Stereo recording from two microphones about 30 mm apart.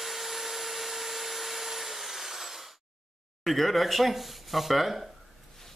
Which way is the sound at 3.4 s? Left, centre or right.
Centre.